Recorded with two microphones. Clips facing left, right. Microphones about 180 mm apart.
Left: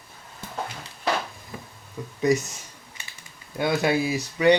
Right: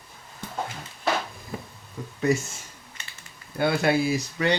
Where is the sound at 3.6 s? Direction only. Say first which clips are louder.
Even; 15° left (ahead or behind).